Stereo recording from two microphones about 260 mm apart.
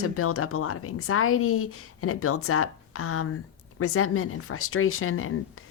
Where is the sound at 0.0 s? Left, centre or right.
Left.